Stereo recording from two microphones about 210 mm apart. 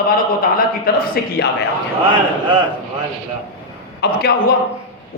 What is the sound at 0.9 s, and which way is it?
Speech, 45° left (ahead or behind).